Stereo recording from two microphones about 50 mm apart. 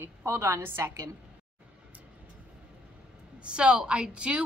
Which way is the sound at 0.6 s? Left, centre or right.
Right.